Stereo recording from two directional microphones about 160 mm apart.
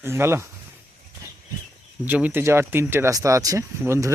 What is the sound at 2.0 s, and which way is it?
Speech, 10° right (ahead or behind).